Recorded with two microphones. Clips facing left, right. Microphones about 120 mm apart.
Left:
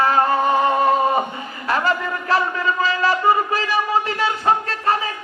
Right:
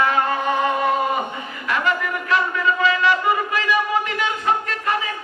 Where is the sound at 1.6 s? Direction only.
35° left (ahead or behind).